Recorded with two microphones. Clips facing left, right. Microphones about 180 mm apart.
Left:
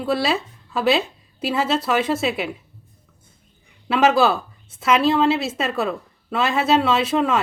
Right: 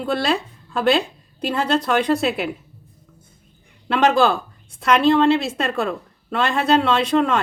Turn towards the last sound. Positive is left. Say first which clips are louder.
# right 1 dB
turn(degrees=5)  # may be behind; listen again after turning